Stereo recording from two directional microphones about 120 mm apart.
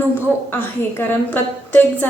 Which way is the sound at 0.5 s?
15° left (ahead or behind).